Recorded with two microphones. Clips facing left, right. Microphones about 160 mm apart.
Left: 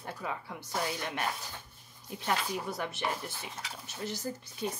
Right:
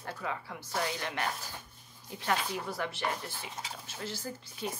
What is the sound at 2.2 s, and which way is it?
Speech, 20° left (ahead or behind).